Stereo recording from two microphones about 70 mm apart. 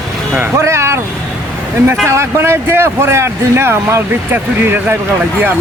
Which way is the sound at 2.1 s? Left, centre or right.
Right.